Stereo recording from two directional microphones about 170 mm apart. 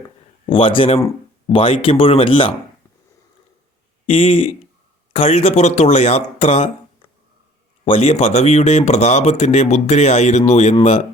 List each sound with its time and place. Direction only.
0.4 s speech: 30° left (ahead or behind)
4.1 s speech: 35° left (ahead or behind)
7.9 s speech: 35° left (ahead or behind)